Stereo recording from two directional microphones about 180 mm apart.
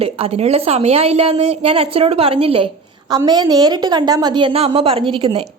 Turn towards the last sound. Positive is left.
turn(degrees=-30)  # may be behind; listen again after turning